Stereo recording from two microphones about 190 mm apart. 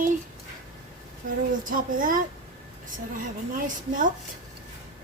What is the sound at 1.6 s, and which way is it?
Speech, 45° right (ahead or behind).